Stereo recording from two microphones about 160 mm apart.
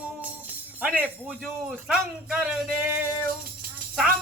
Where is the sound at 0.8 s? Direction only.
10° right (ahead or behind).